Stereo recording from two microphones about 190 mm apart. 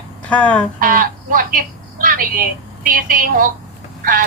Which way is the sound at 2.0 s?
45° right (ahead or behind).